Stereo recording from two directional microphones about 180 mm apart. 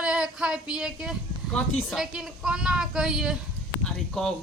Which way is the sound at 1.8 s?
5° right (ahead or behind).